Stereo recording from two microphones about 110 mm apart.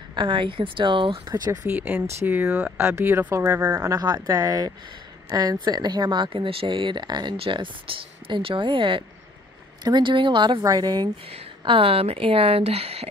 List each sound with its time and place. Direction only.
0.1 s speech: 50° right (ahead or behind)
1.2 s a woman's voice: 35° right (ahead or behind)
1.7 s speech: 15° right (ahead or behind); by 7.3 s 40° right (ahead or behind)
7.3 s speech: 50° right (ahead or behind)
10.6 s a woman's voice: 35° right (ahead or behind)
11.6 s speech: 55° right (ahead or behind)